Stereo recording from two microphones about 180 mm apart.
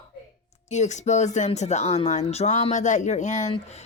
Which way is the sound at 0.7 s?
40° left (ahead or behind).